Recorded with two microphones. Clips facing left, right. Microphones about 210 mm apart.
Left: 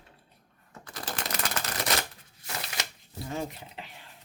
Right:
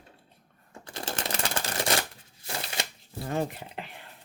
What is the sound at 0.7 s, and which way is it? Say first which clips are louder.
Shuffling cards: right 2 dB; 25° right (ahead or behind).